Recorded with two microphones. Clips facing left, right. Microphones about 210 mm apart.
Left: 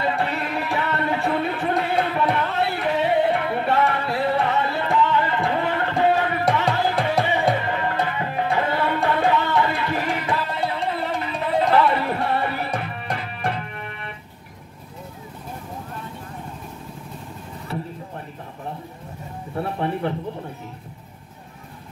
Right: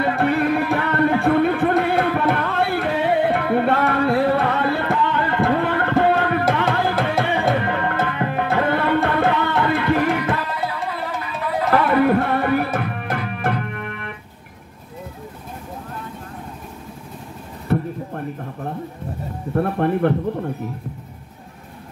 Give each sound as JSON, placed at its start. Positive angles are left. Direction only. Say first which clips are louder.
{"t": 0.0, "sound": "music", "louder": "right 6 dB", "side_deg": -55}
{"t": 10.5, "sound": "music", "louder": "left 1 dB", "side_deg": 25}
{"t": 11.7, "sound": "music", "louder": "right 8 dB", "side_deg": -50}
{"t": 13.3, "sound": "organ", "louder": "right 4 dB", "side_deg": -55}
{"t": 17.6, "sound": "a sound", "louder": "right 9 dB", "side_deg": -55}